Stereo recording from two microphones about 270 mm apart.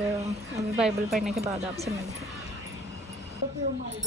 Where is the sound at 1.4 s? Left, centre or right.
Right.